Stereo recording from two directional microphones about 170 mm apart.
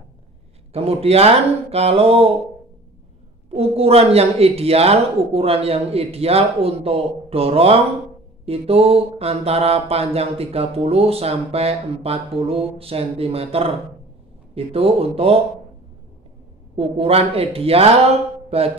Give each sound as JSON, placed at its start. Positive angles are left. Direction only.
{"t": 0.7, "sound": "mantra", "side_deg": -35}
{"t": 3.4, "sound": "mantra", "side_deg": -35}
{"t": 16.7, "sound": "mantra", "side_deg": -35}